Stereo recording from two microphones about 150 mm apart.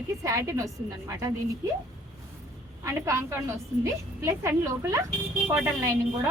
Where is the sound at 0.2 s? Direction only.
20° right (ahead or behind).